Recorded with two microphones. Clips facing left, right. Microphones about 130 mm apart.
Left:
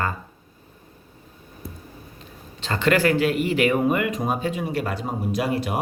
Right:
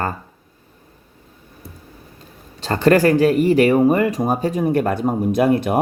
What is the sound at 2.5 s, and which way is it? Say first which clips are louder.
Speech: right 6 dB; 40° right (ahead or behind).